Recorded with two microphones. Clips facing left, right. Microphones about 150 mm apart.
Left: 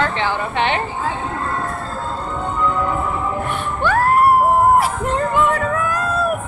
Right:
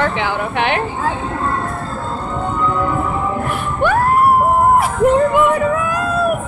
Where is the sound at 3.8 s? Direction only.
15° right (ahead or behind).